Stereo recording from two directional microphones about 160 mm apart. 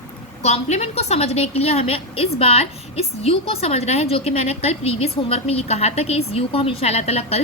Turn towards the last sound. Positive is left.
turn(degrees=40)  # may be behind; listen again after turning